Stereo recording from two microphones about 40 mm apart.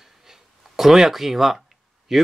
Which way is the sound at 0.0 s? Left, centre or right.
Centre.